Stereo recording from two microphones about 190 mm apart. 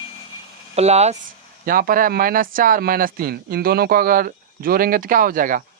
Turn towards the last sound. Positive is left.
turn(degrees=-45)  # may be behind; listen again after turning